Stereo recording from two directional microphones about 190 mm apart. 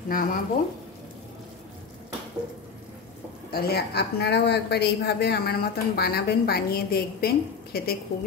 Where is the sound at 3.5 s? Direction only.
55° left (ahead or behind).